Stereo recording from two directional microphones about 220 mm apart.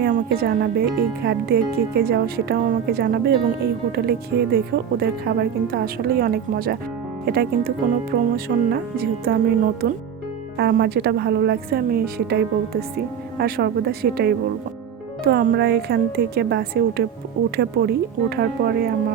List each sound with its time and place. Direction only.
0.0 s speech: 45° right (ahead or behind)